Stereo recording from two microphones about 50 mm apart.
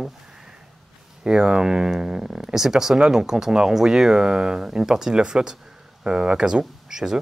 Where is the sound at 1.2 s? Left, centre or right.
Centre.